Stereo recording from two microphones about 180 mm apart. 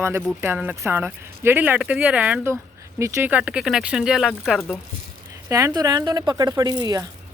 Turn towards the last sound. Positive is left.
turn(degrees=-20)  # may be behind; listen again after turning